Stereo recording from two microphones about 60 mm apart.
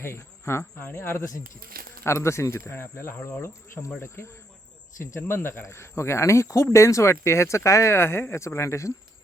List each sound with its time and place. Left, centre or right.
0.0 s speech: left
0.6 s speech: left
5.3 s speech: left
7.9 s speech: left